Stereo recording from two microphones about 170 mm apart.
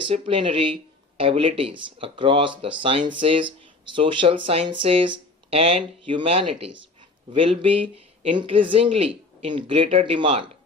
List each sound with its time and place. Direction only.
0.1 s speech: 35° right (ahead or behind)